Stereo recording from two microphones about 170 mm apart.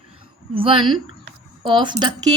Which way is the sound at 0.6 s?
30° right (ahead or behind).